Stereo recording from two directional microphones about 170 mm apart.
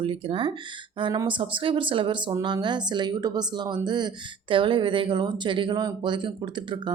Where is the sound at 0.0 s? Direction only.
30° right (ahead or behind).